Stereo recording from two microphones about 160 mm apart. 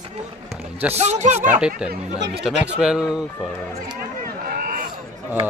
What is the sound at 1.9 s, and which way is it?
Speech, 90° right.